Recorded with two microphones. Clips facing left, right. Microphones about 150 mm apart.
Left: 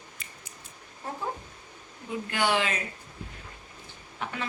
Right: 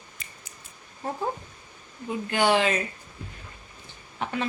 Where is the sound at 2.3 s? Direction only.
25° right (ahead or behind).